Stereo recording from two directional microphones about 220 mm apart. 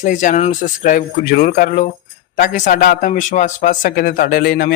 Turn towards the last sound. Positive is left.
turn(degrees=45)  # may be behind; listen again after turning